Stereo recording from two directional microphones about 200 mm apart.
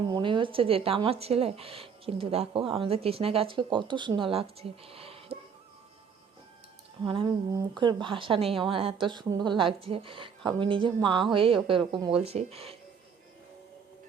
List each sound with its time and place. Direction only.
0.0 s speech: 25° right (ahead or behind)
7.0 s speech: 25° right (ahead or behind)